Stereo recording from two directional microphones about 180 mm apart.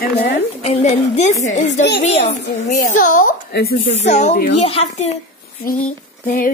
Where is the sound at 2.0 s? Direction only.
40° left (ahead or behind).